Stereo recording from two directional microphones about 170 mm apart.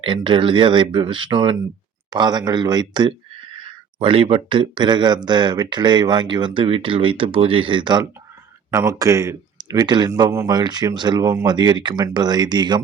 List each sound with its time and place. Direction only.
0.0 s speech: 30° right (ahead or behind)